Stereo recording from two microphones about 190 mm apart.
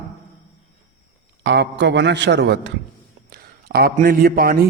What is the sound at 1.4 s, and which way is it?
A man's voice, 65° right (ahead or behind).